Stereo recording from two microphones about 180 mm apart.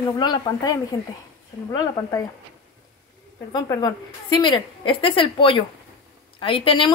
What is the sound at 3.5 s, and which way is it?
A woman's voice, 20° left (ahead or behind).